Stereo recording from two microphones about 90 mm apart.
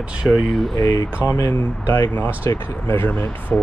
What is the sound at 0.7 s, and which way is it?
Speech, 40° left (ahead or behind).